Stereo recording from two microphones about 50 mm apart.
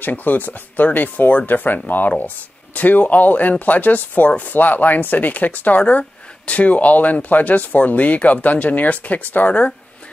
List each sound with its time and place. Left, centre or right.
0.0 s speech: left